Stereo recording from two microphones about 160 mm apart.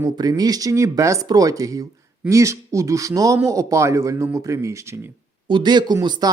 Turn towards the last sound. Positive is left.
turn(degrees=-25)  # may be behind; listen again after turning